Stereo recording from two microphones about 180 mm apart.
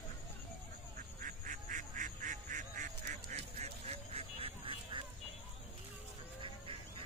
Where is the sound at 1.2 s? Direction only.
45° right (ahead or behind); by 5.0 s 30° right (ahead or behind).